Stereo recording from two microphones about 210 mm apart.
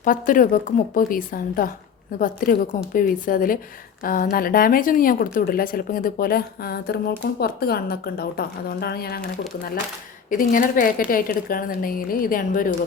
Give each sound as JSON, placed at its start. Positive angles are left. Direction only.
{"t": 0.0, "sound": "a woman's voice", "side_deg": 40}